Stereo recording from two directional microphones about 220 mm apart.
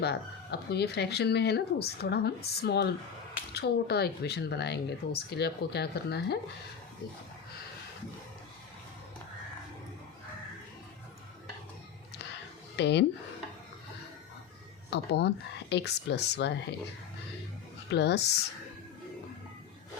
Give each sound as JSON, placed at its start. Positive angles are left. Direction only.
{"t": 0.0, "sound": "speech", "side_deg": 50}
{"t": 12.7, "sound": "speech", "side_deg": 50}
{"t": 14.8, "sound": "speech", "side_deg": 50}
{"t": 17.8, "sound": "speech", "side_deg": 50}